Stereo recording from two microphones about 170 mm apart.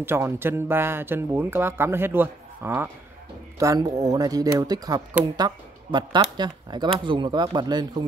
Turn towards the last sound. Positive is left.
turn(degrees=-25)  # may be behind; listen again after turning